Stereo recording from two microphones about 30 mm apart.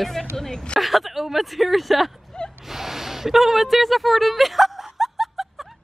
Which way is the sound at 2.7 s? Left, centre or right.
Centre.